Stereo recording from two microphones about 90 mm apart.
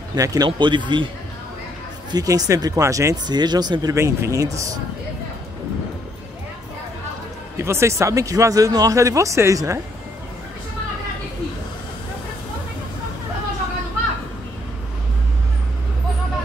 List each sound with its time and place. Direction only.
0.1 s speech: 45° right (ahead or behind)
0.5 s a man's voice: 60° right (ahead or behind)
2.0 s speech: 45° right (ahead or behind)
3.3 s speech: 50° right (ahead or behind)
3.9 s speech: 35° right (ahead or behind)
7.5 s speech: 30° right (ahead or behind)